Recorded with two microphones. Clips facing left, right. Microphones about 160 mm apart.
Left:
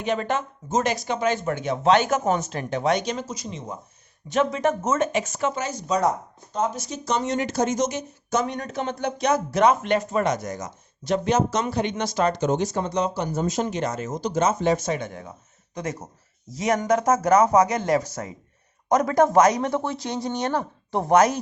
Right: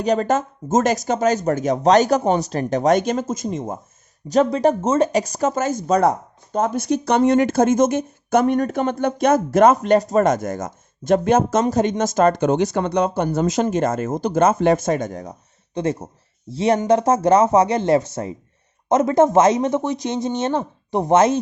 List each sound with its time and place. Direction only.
0.0 s speech: 40° right (ahead or behind)
4.3 s speech: 35° right (ahead or behind); by 13.7 s 80° right
13.7 s speech: 50° right (ahead or behind)
15.7 s speech: 30° right (ahead or behind)